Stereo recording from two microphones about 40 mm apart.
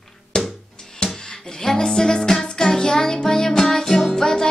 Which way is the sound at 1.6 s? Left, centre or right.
Centre.